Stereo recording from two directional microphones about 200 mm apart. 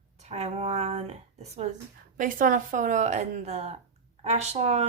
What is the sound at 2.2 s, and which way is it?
Speech, 40° right (ahead or behind).